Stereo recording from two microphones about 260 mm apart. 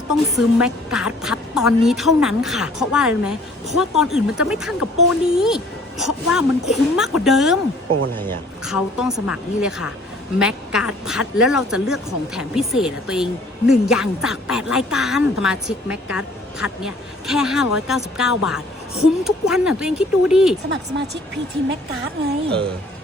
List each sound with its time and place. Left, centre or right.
0.1 s speech: centre
20.9 s speech: right